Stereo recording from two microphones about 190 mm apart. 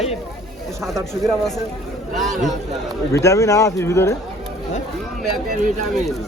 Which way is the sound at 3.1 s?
15° left (ahead or behind).